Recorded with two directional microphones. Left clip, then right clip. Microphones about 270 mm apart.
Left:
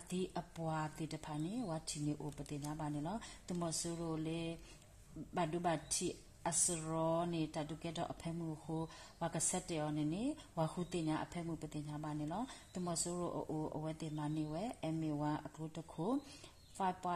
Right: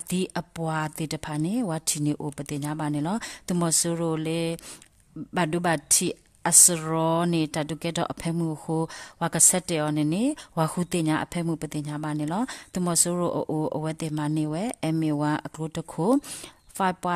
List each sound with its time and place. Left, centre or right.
0.1 s a woman's voice: right